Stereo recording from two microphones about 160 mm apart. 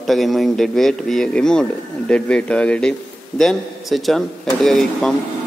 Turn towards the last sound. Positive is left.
turn(degrees=0)  # may be behind; listen again after turning